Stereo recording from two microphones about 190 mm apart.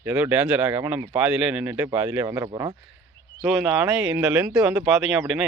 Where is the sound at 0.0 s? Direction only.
10° right (ahead or behind).